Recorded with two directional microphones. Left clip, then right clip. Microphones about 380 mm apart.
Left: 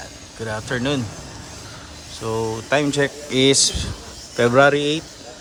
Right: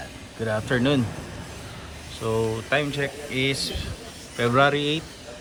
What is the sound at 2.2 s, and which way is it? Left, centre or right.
Speech, centre.